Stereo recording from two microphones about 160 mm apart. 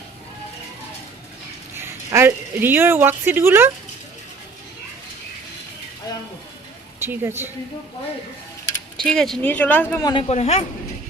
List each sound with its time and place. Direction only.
1.7 s speech: 15° right (ahead or behind)
7.0 s a woman's voice: 15° right (ahead or behind)
9.0 s speech: 5° left (ahead or behind)
10.0 s speech: 25° left (ahead or behind)
10.2 s speech: 40° left (ahead or behind)